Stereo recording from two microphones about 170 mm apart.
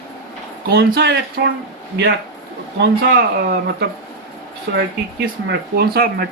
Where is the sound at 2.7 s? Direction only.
70° right (ahead or behind).